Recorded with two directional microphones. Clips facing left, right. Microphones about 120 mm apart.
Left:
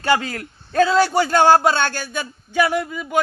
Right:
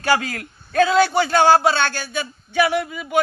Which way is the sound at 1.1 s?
45° left (ahead or behind).